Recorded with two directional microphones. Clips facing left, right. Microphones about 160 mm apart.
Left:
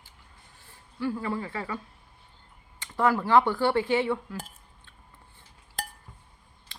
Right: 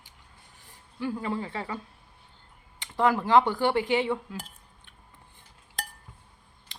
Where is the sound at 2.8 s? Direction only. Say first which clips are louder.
Even; 15° right (ahead or behind).